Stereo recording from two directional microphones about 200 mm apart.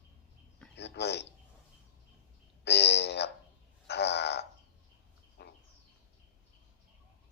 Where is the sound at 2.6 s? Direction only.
55° left (ahead or behind).